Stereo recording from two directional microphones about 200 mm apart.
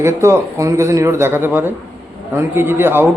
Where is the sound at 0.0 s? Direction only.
15° right (ahead or behind).